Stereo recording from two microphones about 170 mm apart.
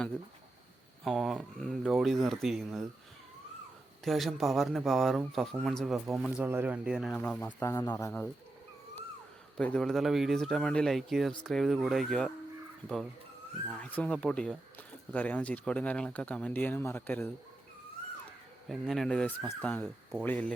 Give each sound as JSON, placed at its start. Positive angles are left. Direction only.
{"t": 1.0, "sound": "speech", "side_deg": 0}
{"t": 4.0, "sound": "speech", "side_deg": 0}
{"t": 7.2, "sound": "speech", "side_deg": 10}
{"t": 9.6, "sound": "speech", "side_deg": 5}
{"t": 13.7, "sound": "speech", "side_deg": 10}
{"t": 18.7, "sound": "speech", "side_deg": 0}